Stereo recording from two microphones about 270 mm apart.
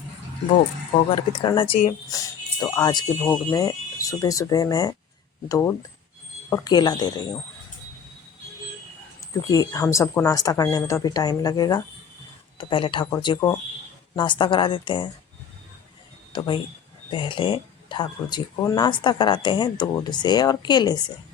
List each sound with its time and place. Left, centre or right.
1.1 s speech: centre
9.3 s speech: centre
16.3 s speech: centre